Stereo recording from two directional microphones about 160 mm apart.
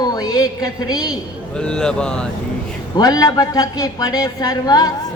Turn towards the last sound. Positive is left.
turn(degrees=25)  # may be behind; listen again after turning